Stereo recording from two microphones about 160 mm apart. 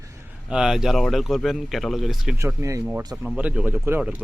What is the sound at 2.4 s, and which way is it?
Speech, 20° right (ahead or behind).